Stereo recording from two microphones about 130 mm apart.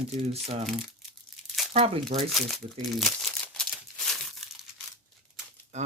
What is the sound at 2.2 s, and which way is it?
Speech, centre (ahead or behind).